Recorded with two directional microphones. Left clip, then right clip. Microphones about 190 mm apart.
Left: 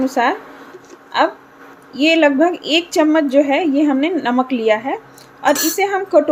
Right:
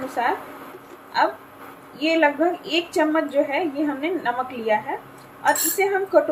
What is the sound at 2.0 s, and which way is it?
A woman's voice, 55° left (ahead or behind).